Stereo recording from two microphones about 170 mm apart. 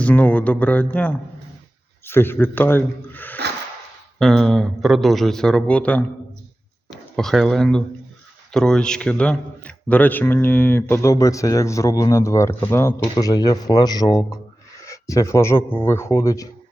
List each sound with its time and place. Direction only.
0.0 s a man's voice: 10° left (ahead or behind)
7.2 s a man's voice: centre (ahead or behind); by 16.5 s 20° left (ahead or behind)